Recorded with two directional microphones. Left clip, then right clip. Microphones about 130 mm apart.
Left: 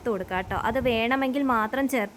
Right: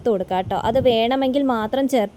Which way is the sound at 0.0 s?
35° right (ahead or behind).